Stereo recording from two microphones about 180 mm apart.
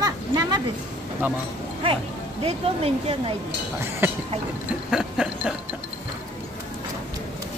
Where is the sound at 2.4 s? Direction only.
35° right (ahead or behind).